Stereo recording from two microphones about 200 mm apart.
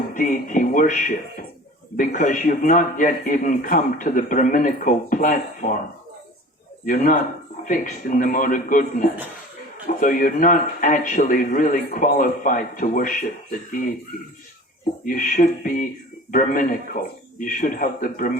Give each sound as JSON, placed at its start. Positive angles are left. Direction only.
{"t": 0.1, "sound": "speech", "side_deg": 40}
{"t": 6.8, "sound": "a man's voice", "side_deg": 45}
{"t": 15.0, "sound": "a man's voice", "side_deg": 40}